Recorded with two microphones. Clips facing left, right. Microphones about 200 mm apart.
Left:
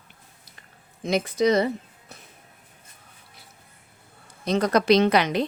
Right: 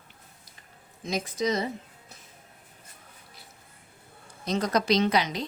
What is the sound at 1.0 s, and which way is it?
Speech, 65° left (ahead or behind).